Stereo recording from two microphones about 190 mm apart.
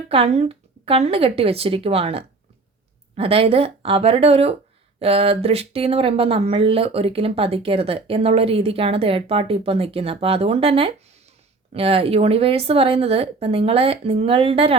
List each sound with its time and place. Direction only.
0.1 s speech: 30° right (ahead or behind)